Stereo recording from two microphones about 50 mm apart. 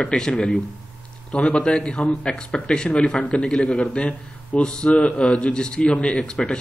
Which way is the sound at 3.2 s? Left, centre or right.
Left.